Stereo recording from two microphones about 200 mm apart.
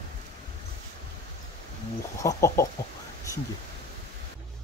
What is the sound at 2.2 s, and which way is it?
Speech, 15° left (ahead or behind).